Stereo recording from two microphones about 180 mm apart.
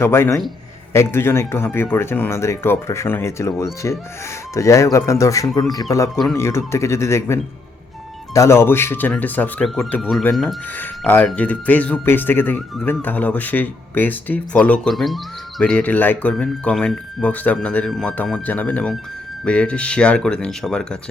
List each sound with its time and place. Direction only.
0.0 s speech: 15° left (ahead or behind)